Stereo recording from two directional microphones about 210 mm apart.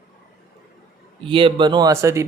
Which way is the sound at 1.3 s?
25° right (ahead or behind).